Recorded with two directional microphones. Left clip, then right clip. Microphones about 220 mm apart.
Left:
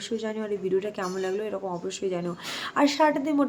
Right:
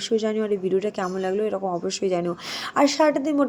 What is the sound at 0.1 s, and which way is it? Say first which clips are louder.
A woman's voice: right 8 dB; 20° right (ahead or behind).